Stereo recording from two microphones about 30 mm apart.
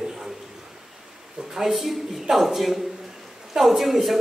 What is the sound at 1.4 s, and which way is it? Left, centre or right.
Speech, centre.